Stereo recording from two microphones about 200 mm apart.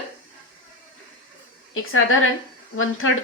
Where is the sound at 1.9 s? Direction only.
90° left.